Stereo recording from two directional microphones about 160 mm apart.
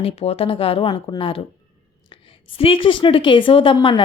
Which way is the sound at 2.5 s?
35° left (ahead or behind).